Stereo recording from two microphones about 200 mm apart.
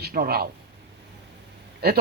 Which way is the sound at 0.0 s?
50° right (ahead or behind).